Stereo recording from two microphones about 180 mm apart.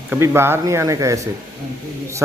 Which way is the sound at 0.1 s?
15° right (ahead or behind).